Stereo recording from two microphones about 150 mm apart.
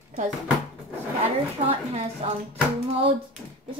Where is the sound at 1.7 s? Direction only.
45° right (ahead or behind).